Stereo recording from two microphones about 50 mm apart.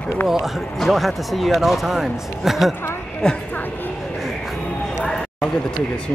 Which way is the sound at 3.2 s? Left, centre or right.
Centre.